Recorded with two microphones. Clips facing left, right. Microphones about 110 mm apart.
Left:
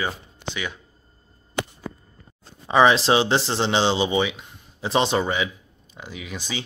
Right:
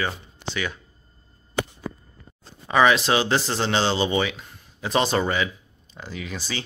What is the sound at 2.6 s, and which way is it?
Speech, 25° left (ahead or behind).